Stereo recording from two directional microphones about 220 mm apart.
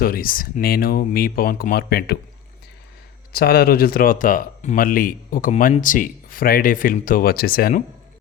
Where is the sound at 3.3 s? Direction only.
45° left (ahead or behind).